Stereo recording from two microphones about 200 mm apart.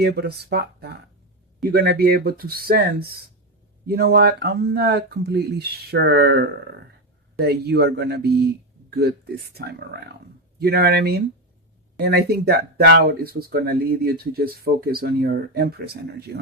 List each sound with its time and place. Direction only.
0.0 s speech: 55° right (ahead or behind)